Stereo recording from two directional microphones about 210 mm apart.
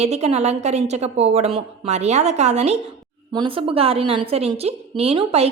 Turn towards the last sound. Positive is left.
turn(degrees=-30)  # may be behind; listen again after turning